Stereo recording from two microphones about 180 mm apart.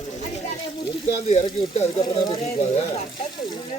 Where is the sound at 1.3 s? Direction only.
35° left (ahead or behind).